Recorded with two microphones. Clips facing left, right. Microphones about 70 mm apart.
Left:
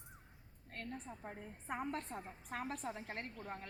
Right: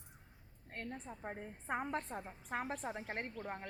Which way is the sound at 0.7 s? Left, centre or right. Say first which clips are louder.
Right 1 dB; right.